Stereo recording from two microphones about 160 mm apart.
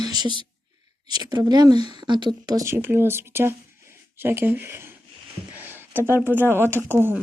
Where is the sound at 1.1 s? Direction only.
25° right (ahead or behind).